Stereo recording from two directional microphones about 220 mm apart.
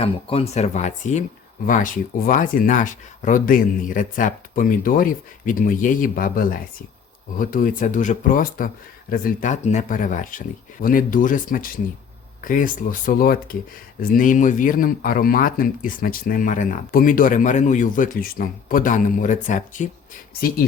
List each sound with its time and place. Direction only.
0.0 s speech: 25° left (ahead or behind)